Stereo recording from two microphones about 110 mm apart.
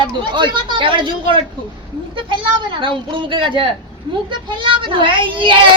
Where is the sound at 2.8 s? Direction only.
50° right (ahead or behind).